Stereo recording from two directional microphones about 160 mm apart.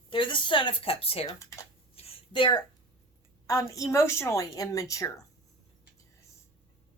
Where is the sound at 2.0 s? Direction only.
35° left (ahead or behind).